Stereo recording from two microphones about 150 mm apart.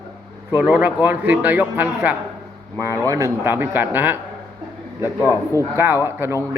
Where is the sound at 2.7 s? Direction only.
20° right (ahead or behind).